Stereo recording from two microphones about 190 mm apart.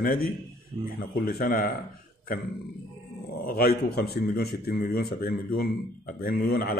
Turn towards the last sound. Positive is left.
turn(degrees=55)  # may be behind; listen again after turning